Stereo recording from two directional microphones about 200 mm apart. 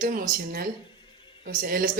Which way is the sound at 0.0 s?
45° right (ahead or behind).